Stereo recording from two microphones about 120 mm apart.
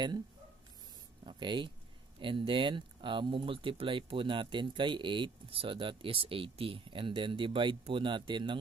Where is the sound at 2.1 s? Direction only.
45° right (ahead or behind).